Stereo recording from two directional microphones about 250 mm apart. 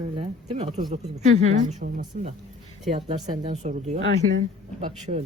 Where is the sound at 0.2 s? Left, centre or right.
Right.